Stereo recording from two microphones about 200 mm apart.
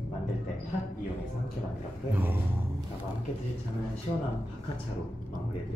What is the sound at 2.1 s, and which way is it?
Speech, 10° right (ahead or behind).